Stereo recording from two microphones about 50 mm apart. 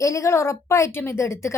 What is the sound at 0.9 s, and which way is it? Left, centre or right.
Speech, left.